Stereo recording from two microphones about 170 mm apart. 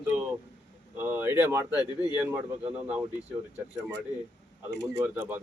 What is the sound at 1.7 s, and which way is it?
Speech, 25° left (ahead or behind).